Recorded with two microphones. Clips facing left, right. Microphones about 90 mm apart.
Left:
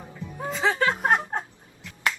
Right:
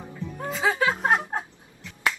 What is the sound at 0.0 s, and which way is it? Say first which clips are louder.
Music: right 1 dB; centre (ahead or behind).